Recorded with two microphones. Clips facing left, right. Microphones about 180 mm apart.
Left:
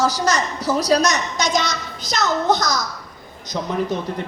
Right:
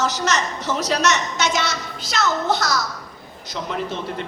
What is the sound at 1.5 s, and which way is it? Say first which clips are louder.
A woman's voice: left 2 dB; 15° left (ahead or behind).